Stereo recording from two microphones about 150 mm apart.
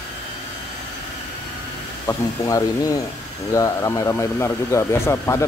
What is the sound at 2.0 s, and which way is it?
Speech, 20° left (ahead or behind).